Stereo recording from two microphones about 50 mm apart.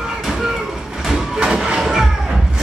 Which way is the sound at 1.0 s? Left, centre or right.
Centre.